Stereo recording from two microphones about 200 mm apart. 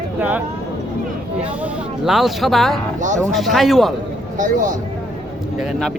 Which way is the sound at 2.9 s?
40° right (ahead or behind).